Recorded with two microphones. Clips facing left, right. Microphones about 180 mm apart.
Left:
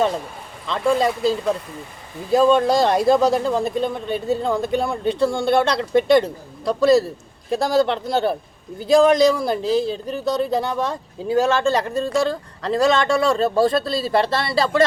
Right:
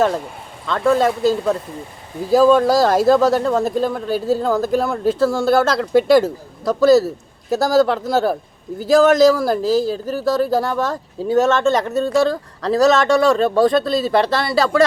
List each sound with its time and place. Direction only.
0.9 s speech: centre (ahead or behind)
13.3 s speech: 30° left (ahead or behind)